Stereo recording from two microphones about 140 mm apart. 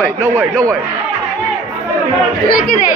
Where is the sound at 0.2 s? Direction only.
15° right (ahead or behind).